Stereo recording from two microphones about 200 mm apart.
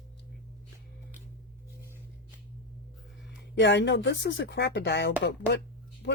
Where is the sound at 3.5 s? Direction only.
60° left (ahead or behind).